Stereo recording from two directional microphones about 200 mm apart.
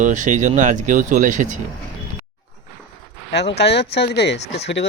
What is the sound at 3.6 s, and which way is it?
Speech, 55° left (ahead or behind).